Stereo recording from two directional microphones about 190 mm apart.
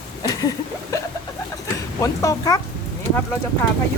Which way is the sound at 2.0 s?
20° left (ahead or behind).